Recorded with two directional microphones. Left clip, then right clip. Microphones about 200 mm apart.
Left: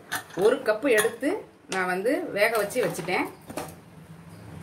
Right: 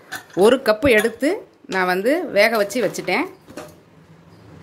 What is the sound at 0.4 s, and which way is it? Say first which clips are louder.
Speech: right 8 dB; 55° right (ahead or behind).